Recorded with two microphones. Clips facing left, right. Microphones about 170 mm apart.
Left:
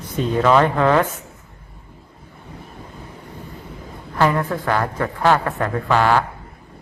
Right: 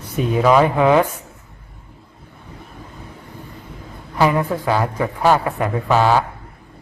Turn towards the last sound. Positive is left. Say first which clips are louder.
# right 1 dB
turn(degrees=-10)  # may be behind; listen again after turning